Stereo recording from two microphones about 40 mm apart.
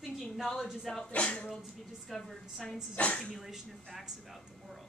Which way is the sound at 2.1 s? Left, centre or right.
Centre.